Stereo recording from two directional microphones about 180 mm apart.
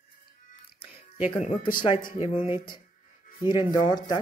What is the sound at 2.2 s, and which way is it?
Speech, 35° left (ahead or behind).